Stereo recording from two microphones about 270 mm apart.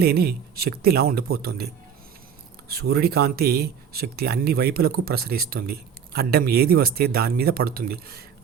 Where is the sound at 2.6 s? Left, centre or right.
Right.